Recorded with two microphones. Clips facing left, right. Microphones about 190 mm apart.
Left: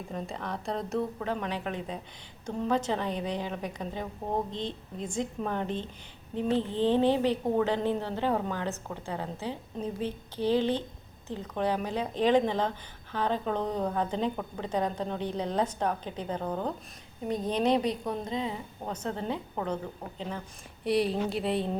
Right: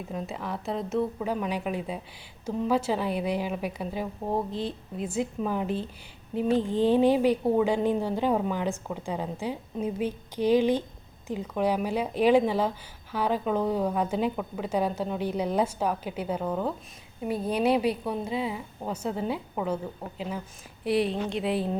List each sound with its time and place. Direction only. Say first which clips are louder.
0.1 s a woman's voice: right 2 dB; 5° right (ahead or behind)